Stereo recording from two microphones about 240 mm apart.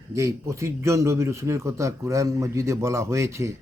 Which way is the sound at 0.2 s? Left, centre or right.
Centre.